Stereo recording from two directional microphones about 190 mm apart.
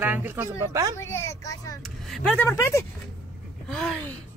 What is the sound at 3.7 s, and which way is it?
Speech, centre (ahead or behind).